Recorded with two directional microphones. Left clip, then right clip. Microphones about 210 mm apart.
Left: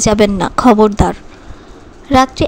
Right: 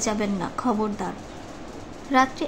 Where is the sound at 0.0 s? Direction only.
40° left (ahead or behind).